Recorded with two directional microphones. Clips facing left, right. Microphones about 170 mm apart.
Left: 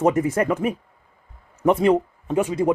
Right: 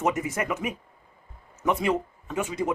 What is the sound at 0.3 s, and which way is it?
Speech, 30° left (ahead or behind).